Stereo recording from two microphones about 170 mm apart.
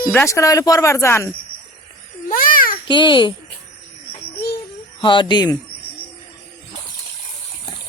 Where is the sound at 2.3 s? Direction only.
55° left (ahead or behind).